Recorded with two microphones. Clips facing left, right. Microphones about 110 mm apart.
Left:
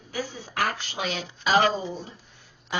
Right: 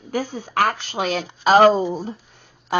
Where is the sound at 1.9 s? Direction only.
60° right (ahead or behind).